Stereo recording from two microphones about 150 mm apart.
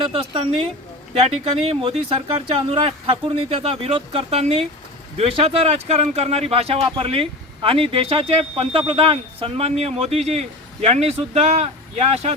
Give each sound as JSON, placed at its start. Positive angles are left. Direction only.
{"t": 0.0, "sound": "speech", "side_deg": -35}